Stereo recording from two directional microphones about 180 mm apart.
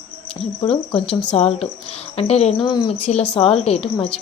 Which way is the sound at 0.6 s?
30° left (ahead or behind).